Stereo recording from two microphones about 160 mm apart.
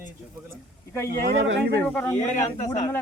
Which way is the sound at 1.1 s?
85° right.